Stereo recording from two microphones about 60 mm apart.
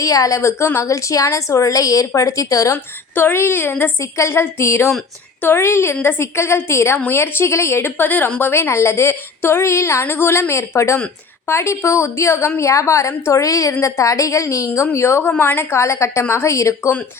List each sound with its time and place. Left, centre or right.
0.0 s a woman's voice: left
2.7 s speech: left
4.0 s a woman's voice: left
15.4 s a woman's voice: left